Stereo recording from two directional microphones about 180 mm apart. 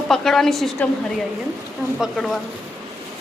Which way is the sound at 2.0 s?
Centre (ahead or behind).